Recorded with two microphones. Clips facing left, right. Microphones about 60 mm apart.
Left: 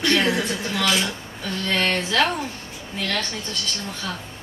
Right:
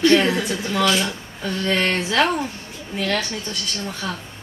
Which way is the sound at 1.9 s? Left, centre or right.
Centre.